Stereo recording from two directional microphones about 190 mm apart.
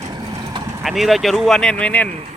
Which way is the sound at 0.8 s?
Centre (ahead or behind).